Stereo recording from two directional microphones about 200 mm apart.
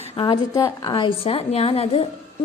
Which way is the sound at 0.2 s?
20° left (ahead or behind).